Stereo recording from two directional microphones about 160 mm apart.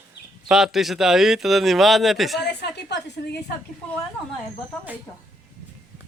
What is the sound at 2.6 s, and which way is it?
Speech, 90° left.